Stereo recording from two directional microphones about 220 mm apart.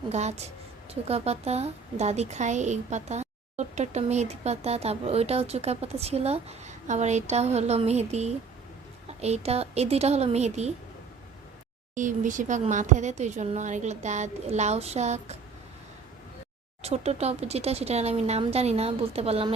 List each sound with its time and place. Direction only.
0.1 s a woman's voice: 30° right (ahead or behind)
11.9 s speech: 35° right (ahead or behind)
16.8 s a woman's voice: 30° right (ahead or behind)